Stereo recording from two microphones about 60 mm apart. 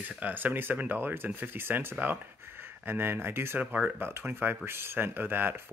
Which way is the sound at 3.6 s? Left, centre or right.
Right.